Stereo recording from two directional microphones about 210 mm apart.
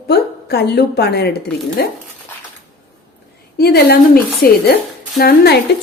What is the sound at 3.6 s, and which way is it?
A woman's voice, 45° left (ahead or behind).